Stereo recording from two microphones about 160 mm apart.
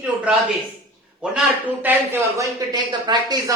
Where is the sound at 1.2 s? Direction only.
5° right (ahead or behind).